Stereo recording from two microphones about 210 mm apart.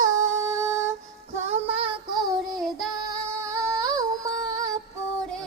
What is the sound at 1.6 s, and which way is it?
Female singing, 25° right (ahead or behind).